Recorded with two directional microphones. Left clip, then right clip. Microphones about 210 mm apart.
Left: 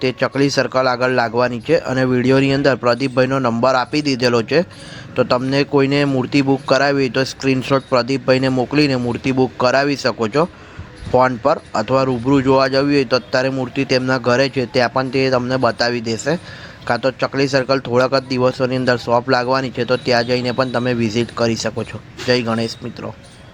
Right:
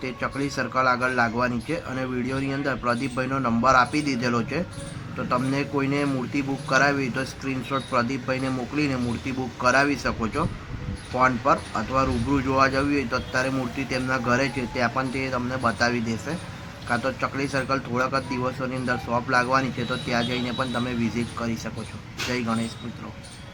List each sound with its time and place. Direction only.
0.0 s speech: 35° left (ahead or behind)